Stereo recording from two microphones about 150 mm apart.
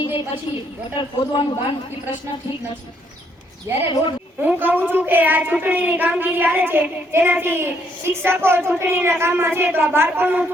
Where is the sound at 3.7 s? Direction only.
15° right (ahead or behind).